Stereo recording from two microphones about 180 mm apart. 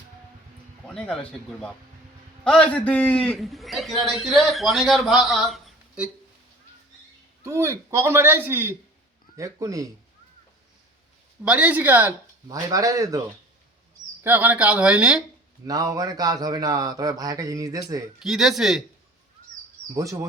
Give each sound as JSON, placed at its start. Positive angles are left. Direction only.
{"t": 0.9, "sound": "a man's voice", "side_deg": 5}
{"t": 7.4, "sound": "a man's voice", "side_deg": -15}
{"t": 11.4, "sound": "a man's voice", "side_deg": -10}
{"t": 14.3, "sound": "a man's voice", "side_deg": -10}
{"t": 15.6, "sound": "speech", "side_deg": -20}
{"t": 18.2, "sound": "a man's voice", "side_deg": 0}
{"t": 19.9, "sound": "a man's voice", "side_deg": -15}